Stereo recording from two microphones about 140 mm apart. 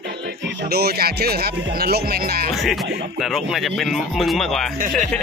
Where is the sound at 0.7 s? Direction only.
90° right.